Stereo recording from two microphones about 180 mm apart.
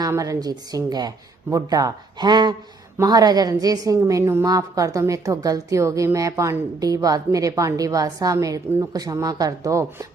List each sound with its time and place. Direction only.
0.0 s a woman's voice: 20° right (ahead or behind)